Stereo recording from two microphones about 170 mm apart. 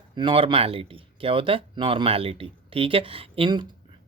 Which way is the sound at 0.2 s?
30° right (ahead or behind).